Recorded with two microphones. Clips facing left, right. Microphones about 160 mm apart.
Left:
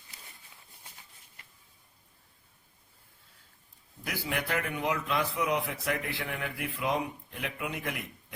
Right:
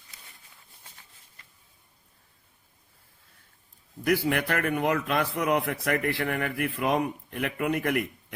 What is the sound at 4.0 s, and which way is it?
A man's voice, 60° right (ahead or behind).